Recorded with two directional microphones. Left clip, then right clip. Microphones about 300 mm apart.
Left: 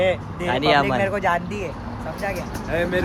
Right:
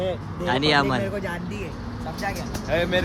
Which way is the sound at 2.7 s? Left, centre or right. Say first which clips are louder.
Even; right.